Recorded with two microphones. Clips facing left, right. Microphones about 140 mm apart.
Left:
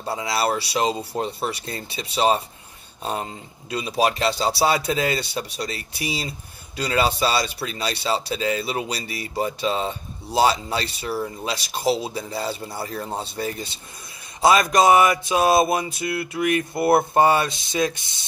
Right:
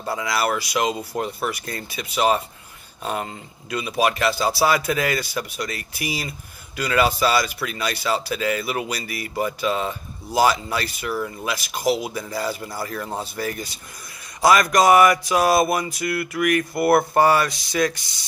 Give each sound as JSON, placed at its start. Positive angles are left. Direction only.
{"t": 0.0, "sound": "speech", "side_deg": 30}